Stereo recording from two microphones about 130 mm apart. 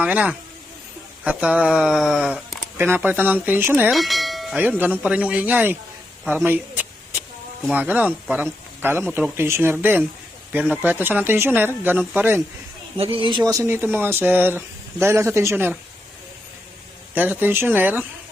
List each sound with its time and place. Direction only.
0.0 s speech: 10° right (ahead or behind)
2.7 s speech: 15° right (ahead or behind)
3.9 s bell: centre (ahead or behind)
4.8 s speech: 10° right (ahead or behind)
13.0 s speech: 40° right (ahead or behind)
13.5 s speech: 20° right (ahead or behind)
17.2 s speech: 15° right (ahead or behind)